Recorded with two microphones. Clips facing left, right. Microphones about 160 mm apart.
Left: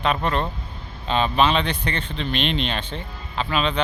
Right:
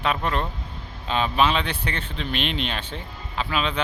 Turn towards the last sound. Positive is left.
turn(degrees=-5)  # may be behind; listen again after turning